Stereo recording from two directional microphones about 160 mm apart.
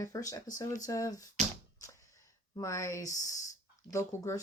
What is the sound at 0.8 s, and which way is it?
Speech, 20° left (ahead or behind).